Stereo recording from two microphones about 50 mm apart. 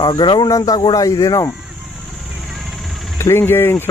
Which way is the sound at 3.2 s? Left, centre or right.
Left.